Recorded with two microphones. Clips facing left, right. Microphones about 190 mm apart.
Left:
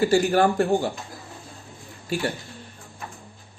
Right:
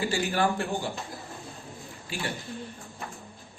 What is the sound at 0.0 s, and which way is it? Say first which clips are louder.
Speech: left 8 dB; 45° left (ahead or behind).